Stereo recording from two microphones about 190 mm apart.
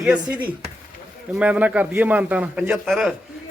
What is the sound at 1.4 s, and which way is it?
A man's voice, 5° right (ahead or behind).